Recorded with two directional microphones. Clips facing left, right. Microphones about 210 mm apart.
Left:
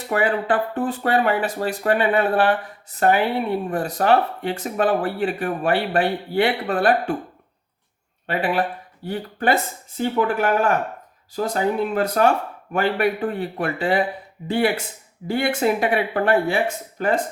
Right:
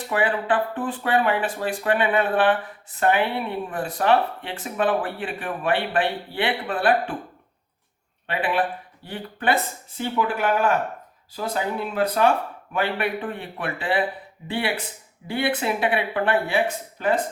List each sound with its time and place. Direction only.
0.1 s speech: 40° left (ahead or behind)
8.3 s speech: 40° left (ahead or behind)